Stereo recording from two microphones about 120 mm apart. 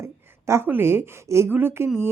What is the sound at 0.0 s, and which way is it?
A woman's voice, 20° right (ahead or behind).